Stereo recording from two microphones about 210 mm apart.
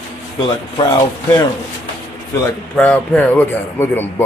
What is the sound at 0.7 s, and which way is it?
Speech, 20° left (ahead or behind).